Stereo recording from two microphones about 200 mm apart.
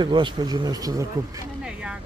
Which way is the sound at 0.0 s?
25° right (ahead or behind).